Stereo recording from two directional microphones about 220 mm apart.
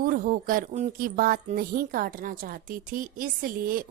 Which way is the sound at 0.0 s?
40° right (ahead or behind).